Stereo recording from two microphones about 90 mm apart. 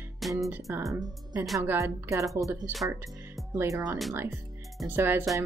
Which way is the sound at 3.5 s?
35° right (ahead or behind).